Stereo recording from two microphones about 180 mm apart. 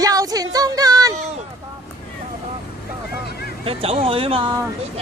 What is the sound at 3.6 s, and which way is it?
Speech, 30° right (ahead or behind).